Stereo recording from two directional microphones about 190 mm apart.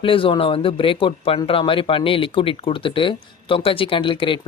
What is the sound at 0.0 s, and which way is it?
Speech, 30° left (ahead or behind).